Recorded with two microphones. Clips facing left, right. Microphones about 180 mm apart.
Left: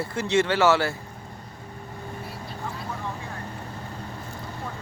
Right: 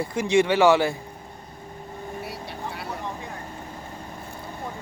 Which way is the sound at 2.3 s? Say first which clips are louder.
Right 1 dB; 70° right (ahead or behind).